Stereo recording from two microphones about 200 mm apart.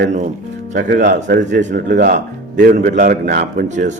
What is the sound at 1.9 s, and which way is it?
Speech, 60° right (ahead or behind).